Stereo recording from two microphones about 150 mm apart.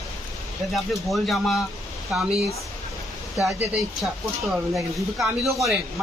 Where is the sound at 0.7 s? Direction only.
Centre (ahead or behind).